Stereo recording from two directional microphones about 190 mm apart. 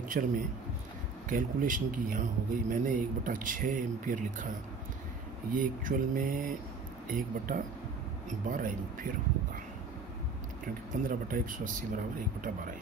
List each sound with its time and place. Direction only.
0.2 s speech: 50° right (ahead or behind)
5.5 s speech: 45° right (ahead or behind)
11.1 s speech: 45° right (ahead or behind)